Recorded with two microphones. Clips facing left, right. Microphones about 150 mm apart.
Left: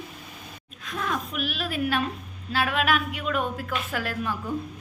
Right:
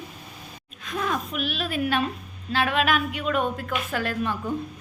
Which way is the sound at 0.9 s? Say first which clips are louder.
Right 2 dB; centre (ahead or behind).